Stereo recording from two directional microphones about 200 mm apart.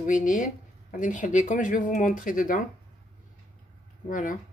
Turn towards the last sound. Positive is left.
turn(degrees=40)  # may be behind; listen again after turning